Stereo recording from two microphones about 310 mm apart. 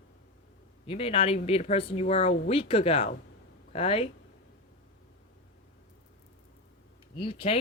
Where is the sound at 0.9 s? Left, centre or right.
Centre.